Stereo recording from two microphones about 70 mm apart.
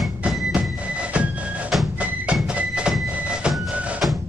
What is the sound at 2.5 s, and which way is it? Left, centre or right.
Music, centre.